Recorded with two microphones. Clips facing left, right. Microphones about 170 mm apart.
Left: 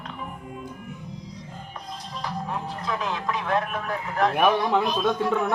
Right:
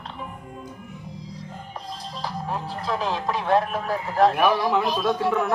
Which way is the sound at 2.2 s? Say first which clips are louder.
Right 1 dB; 30° right (ahead or behind).